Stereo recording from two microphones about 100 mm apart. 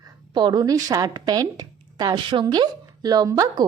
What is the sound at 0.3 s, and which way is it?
A woman's voice, 45° right (ahead or behind).